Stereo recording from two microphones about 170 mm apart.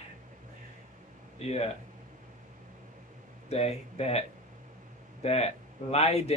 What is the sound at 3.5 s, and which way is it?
Speech, 40° left (ahead or behind).